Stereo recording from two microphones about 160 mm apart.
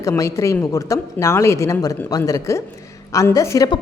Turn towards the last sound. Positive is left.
turn(degrees=25)  # may be behind; listen again after turning